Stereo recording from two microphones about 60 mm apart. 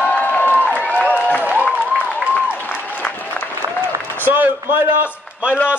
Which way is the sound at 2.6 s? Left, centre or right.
Left.